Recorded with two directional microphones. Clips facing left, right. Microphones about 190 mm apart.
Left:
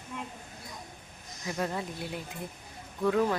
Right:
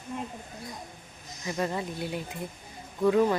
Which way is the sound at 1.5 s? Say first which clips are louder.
Right 2 dB; centre (ahead or behind).